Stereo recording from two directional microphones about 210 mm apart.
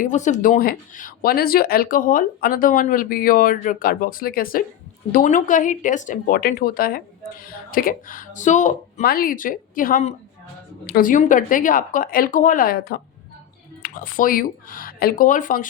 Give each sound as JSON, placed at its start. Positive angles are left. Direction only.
{"t": 0.0, "sound": "speech", "side_deg": 35}